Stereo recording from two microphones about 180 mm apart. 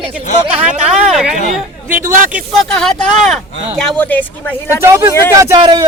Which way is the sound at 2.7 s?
Centre (ahead or behind).